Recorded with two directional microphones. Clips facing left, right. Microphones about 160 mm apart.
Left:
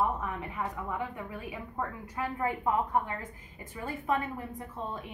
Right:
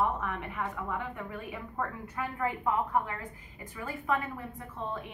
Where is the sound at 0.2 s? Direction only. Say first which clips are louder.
Even; 15° left (ahead or behind).